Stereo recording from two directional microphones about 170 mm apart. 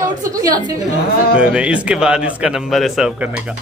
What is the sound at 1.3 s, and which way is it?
Speech, 5° right (ahead or behind).